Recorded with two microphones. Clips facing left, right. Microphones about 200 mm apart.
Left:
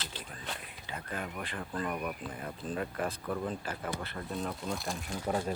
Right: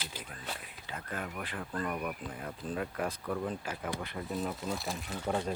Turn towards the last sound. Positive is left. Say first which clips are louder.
# even
turn(degrees=10)  # may be behind; listen again after turning